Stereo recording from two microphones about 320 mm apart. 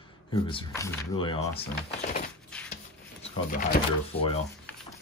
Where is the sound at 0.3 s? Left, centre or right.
Centre.